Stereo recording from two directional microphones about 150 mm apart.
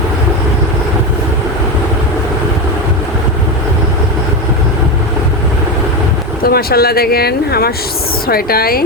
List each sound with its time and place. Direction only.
6.4 s speech: 90° left